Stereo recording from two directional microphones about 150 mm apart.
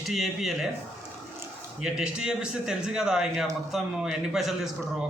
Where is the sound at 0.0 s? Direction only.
Centre (ahead or behind).